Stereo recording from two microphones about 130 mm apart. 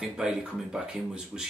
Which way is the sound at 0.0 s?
5° right (ahead or behind).